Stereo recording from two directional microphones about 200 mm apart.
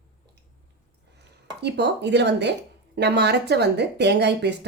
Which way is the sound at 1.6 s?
55° right (ahead or behind).